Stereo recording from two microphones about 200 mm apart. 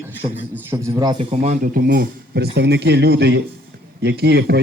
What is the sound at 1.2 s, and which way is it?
A man's voice, 30° right (ahead or behind).